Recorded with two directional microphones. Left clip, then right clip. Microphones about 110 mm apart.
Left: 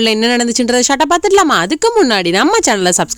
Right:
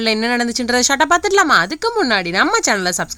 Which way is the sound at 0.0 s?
65° left (ahead or behind).